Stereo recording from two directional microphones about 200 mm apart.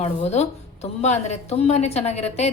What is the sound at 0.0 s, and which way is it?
A woman's voice, 30° left (ahead or behind).